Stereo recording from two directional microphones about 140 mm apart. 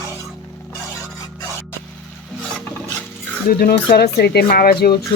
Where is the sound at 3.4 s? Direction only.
90° left.